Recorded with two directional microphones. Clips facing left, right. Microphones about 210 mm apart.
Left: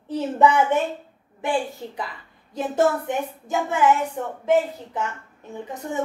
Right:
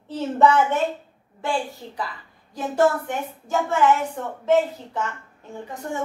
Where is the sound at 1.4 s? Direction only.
20° left (ahead or behind).